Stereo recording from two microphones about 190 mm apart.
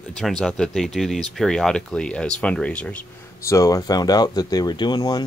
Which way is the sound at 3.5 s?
20° left (ahead or behind).